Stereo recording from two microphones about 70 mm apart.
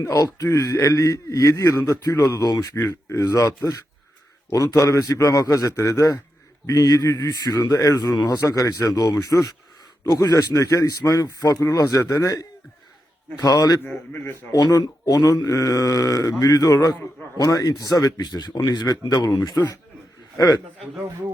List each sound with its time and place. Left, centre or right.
0.0 s a man's voice: left
0.6 s a man's voice: left
2.1 s speech: left
3.1 s a man's voice: left
5.7 s a man's voice: left
6.7 s speech: left
8.4 s a man's voice: left
11.6 s a man's voice: left
13.4 s speech: left
13.8 s speech: left
14.5 s a man's voice: left